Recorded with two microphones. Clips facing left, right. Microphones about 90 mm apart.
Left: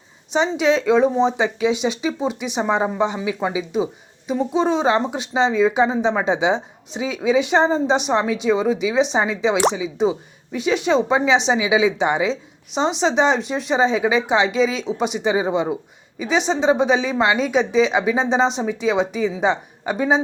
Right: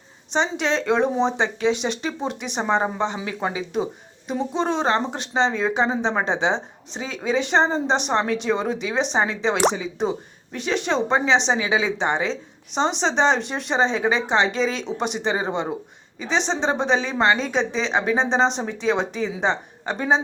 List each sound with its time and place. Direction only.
0.3 s a woman's voice: 5° left (ahead or behind)